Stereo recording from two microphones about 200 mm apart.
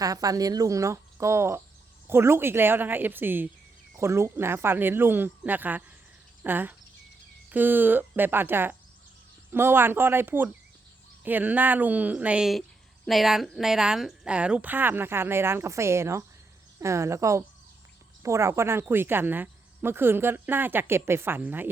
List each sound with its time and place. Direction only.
0.0 s speech: 20° right (ahead or behind)